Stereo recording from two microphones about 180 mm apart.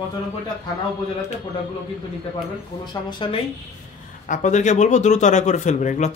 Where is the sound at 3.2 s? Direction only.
25° left (ahead or behind).